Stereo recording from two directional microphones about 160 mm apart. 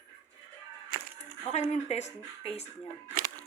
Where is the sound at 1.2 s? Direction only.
45° left (ahead or behind).